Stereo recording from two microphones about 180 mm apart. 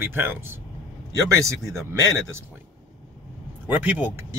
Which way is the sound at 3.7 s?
10° right (ahead or behind).